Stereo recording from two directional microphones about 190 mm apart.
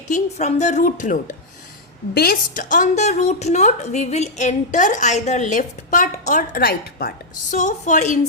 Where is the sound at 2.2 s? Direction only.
50° left (ahead or behind).